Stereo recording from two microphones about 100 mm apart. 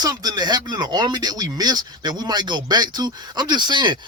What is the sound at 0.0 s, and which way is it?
Speech, 40° right (ahead or behind).